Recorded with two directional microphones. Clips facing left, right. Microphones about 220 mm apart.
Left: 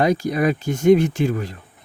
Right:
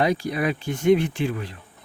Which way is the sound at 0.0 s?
45° left (ahead or behind).